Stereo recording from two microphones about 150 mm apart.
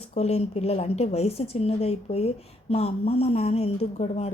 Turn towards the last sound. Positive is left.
turn(degrees=45)  # may be behind; listen again after turning